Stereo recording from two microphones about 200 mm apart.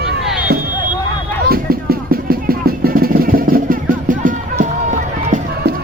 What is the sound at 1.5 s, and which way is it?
Music, 50° right (ahead or behind).